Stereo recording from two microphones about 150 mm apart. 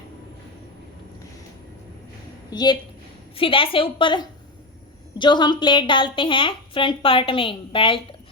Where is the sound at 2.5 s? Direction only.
30° left (ahead or behind).